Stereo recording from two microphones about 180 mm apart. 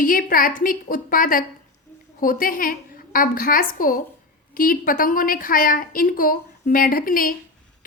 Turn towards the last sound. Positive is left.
turn(degrees=50)  # may be behind; listen again after turning